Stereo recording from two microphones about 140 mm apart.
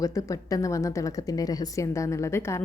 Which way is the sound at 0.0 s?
25° left (ahead or behind).